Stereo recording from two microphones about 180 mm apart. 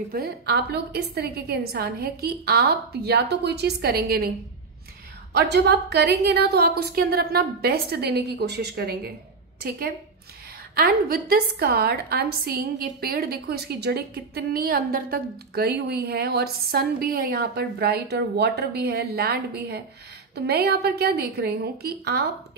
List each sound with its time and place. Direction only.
0.1 s a woman's voice: 60° right (ahead or behind)
5.3 s a woman's voice: 70° right (ahead or behind)